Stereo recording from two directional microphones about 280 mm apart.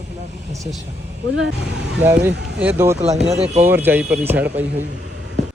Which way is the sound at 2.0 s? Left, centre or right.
Centre.